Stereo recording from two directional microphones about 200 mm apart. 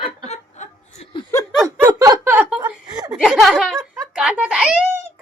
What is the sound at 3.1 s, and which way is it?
A child's voice, centre (ahead or behind).